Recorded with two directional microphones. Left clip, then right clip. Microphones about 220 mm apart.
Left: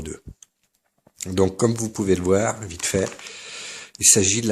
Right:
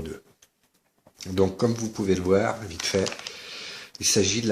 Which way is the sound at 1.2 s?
40° left (ahead or behind).